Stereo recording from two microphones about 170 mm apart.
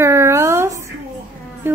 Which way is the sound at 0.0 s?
15° right (ahead or behind).